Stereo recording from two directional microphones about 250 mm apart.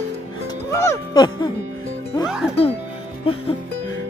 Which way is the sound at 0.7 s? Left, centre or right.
Centre.